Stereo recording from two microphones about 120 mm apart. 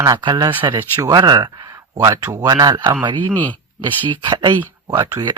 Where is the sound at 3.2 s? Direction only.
15° left (ahead or behind).